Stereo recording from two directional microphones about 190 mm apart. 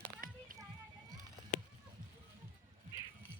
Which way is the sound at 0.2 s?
50° right (ahead or behind).